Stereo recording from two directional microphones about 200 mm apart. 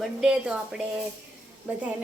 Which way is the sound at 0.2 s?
5° right (ahead or behind).